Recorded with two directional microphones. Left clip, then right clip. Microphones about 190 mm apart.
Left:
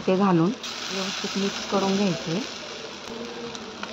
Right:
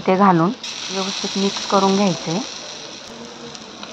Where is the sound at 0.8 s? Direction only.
20° left (ahead or behind).